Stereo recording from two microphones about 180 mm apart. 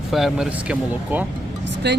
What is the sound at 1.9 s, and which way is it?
Speech, 70° right (ahead or behind).